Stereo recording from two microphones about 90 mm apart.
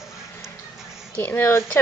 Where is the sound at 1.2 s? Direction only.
25° left (ahead or behind).